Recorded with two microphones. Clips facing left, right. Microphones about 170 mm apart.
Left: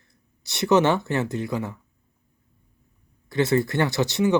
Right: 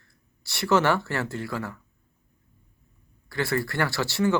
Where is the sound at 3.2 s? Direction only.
20° left (ahead or behind).